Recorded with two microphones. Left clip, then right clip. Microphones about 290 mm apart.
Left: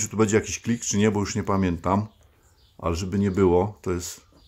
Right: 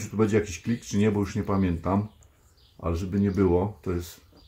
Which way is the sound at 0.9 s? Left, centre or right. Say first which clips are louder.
Left 2 dB; left.